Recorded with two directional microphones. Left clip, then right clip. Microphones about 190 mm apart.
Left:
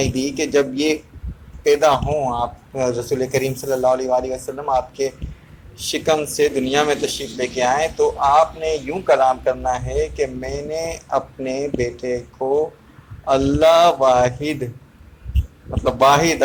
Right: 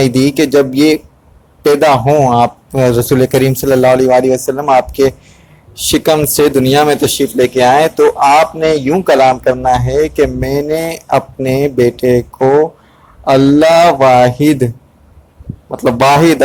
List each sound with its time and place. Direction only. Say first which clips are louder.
0.0 s a man's voice: right 11 dB; 45° right (ahead or behind)
2.3 s a man's voice: right 12 dB; 45° right (ahead or behind); by 9.7 s 30° right (ahead or behind)
9.7 s a man's voice: right 10 dB; 45° right (ahead or behind)
16.0 s a man's voice: right 6 dB; 40° right (ahead or behind)